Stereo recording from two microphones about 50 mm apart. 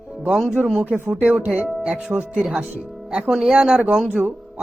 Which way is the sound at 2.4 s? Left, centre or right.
Centre.